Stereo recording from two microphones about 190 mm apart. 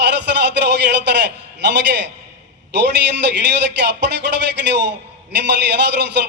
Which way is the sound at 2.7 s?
65° right (ahead or behind).